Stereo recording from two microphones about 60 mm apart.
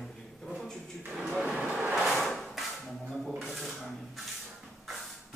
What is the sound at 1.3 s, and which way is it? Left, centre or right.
Vehicle, centre.